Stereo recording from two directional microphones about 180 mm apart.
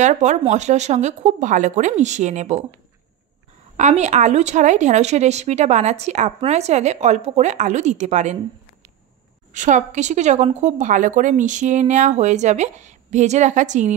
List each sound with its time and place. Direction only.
0.0 s a woman's voice: 40° right (ahead or behind)
3.7 s a woman's voice: 40° right (ahead or behind)
9.5 s a woman's voice: 45° right (ahead or behind)